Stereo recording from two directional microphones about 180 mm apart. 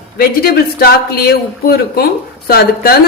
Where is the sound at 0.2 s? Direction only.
55° left (ahead or behind).